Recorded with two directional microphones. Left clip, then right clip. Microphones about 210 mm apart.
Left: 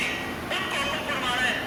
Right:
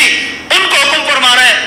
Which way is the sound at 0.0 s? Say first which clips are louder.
Right 18 dB; 50° right (ahead or behind).